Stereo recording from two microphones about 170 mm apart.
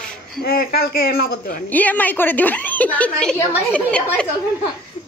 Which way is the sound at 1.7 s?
10° left (ahead or behind).